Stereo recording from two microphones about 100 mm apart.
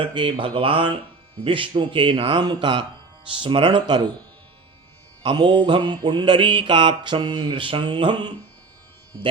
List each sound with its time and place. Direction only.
0.0 s speech: 60° right (ahead or behind)
3.2 s speech: 60° right (ahead or behind)
5.2 s mantra: 50° right (ahead or behind)